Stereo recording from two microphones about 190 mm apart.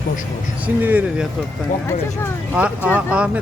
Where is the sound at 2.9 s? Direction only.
5° right (ahead or behind).